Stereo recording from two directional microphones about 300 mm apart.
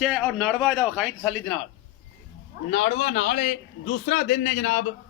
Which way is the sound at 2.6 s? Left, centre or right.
Left.